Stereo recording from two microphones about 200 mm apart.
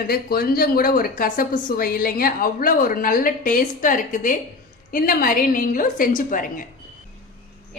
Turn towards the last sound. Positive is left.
turn(degrees=40)  # may be behind; listen again after turning